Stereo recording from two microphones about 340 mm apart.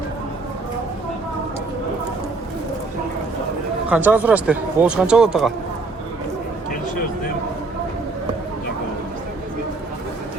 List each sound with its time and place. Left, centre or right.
3.8 s speech: centre